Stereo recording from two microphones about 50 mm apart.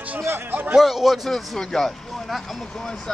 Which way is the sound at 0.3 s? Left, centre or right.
Right.